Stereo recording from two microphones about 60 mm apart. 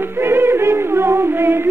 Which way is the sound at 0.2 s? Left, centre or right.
Right.